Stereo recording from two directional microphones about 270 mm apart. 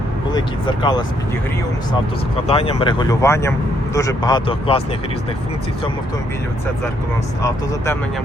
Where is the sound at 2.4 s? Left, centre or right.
Left.